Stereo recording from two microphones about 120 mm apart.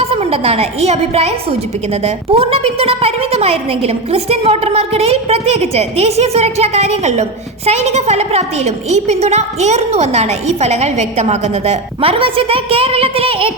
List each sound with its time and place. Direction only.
0.0 s a woman's voice: 55° right (ahead or behind)